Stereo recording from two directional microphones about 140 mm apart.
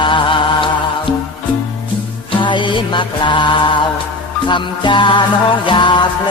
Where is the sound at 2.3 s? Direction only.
35° left (ahead or behind).